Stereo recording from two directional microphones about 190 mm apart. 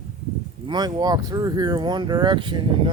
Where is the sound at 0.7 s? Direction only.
20° right (ahead or behind).